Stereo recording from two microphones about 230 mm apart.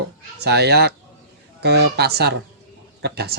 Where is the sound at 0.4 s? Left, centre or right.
Right.